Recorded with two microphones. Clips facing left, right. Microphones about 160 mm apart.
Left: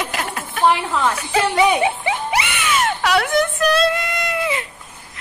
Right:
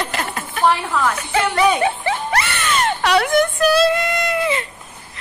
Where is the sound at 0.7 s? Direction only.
20° left (ahead or behind).